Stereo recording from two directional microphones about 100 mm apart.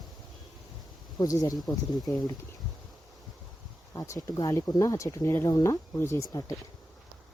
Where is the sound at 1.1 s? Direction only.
35° left (ahead or behind).